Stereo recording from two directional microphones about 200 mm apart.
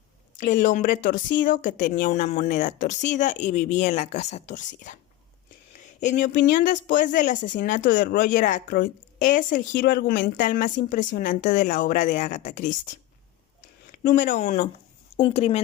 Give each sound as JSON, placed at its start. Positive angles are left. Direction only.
{"t": 0.3, "sound": "speech", "side_deg": 40}
{"t": 6.0, "sound": "speech", "side_deg": 40}
{"t": 14.0, "sound": "speech", "side_deg": 40}